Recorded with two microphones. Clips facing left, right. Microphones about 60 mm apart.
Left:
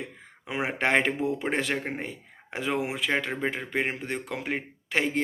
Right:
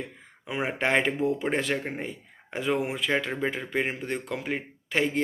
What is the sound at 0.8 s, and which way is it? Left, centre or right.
Speech, left.